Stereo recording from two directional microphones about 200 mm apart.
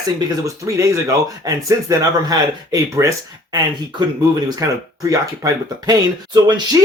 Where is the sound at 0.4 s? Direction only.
15° right (ahead or behind).